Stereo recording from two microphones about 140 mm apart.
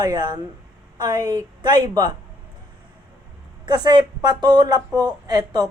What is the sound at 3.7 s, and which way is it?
Speech, 30° right (ahead or behind).